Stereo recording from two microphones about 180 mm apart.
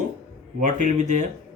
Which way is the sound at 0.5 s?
45° right (ahead or behind).